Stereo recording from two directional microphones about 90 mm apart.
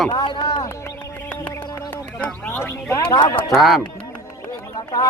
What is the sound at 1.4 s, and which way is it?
Music, 40° left (ahead or behind).